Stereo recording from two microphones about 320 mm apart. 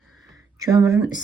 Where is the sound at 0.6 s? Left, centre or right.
Centre.